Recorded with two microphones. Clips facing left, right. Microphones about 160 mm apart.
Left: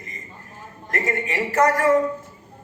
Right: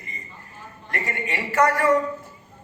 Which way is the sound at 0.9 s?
45° left (ahead or behind).